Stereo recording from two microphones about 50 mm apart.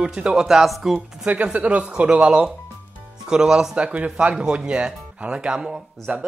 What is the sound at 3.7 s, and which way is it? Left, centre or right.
Speech, right.